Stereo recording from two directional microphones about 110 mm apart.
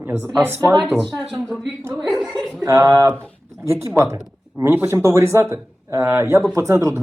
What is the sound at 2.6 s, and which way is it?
Speech, 30° right (ahead or behind).